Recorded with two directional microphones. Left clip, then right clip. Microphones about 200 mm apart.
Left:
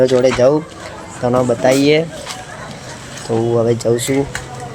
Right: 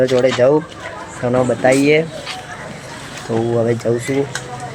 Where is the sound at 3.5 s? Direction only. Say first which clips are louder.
Left 2 dB; 10° left (ahead or behind).